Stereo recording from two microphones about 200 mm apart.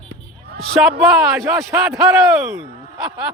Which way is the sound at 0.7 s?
5° right (ahead or behind).